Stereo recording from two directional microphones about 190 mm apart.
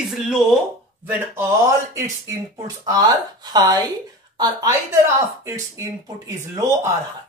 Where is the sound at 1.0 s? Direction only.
10° right (ahead or behind).